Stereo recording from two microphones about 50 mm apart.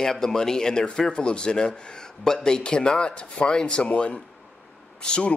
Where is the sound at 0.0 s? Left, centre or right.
Centre.